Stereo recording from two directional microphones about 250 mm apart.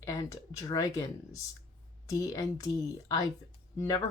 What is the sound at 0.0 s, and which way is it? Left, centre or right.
Speech, centre.